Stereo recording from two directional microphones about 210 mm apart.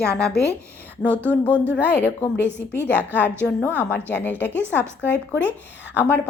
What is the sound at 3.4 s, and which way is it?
A woman's voice, 10° left (ahead or behind).